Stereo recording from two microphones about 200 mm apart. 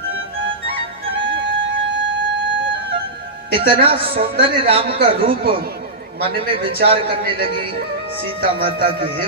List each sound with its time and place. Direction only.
3.5 s a man's voice: 25° right (ahead or behind)